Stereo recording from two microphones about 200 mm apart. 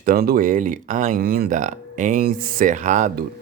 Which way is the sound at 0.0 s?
45° right (ahead or behind).